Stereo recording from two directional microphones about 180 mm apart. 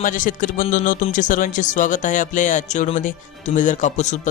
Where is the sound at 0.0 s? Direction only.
45° left (ahead or behind).